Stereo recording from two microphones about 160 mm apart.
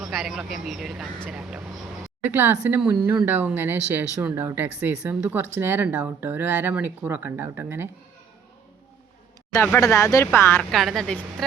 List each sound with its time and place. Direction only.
0.0 s speech: centre (ahead or behind)
9.5 s speech: 20° left (ahead or behind)
10.6 s speech: centre (ahead or behind)